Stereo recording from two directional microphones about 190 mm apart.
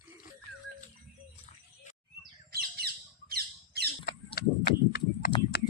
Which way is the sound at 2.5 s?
55° right (ahead or behind).